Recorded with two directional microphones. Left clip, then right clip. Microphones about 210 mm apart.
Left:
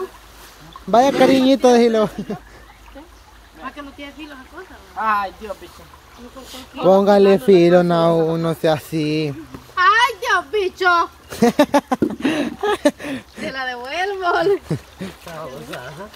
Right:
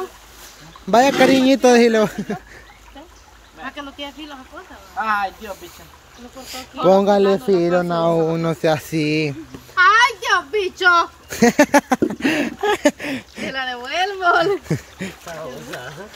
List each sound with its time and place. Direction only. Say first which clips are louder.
0.8 s a woman's voice: even; 15° right (ahead or behind)
3.6 s a sound: right 2 dB; 30° right (ahead or behind)
4.9 s a woman's voice: left 1 dB; 15° right (ahead or behind)
6.4 s a woman's voice: even; 10° right (ahead or behind)
7.1 s speech: left 3 dB; 10° left (ahead or behind)
8.1 s a woman's voice: left 1 dB; 5° right (ahead or behind)
15.2 s speech: left 2 dB; centre (ahead or behind)